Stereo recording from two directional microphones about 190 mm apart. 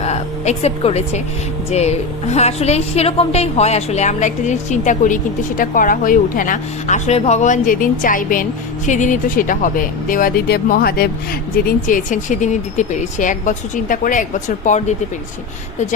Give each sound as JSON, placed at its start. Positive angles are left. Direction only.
{"t": 0.0, "sound": "a woman's voice", "side_deg": 35}